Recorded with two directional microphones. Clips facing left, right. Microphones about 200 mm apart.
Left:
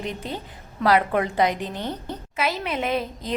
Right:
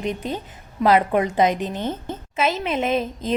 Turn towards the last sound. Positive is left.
turn(degrees=-20)  # may be behind; listen again after turning